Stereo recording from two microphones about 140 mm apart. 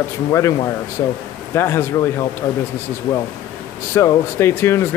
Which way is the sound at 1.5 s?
20° left (ahead or behind).